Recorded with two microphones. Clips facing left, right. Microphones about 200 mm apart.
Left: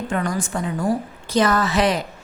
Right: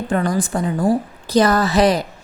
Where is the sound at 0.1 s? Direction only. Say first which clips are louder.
Right 6 dB; 35° right (ahead or behind).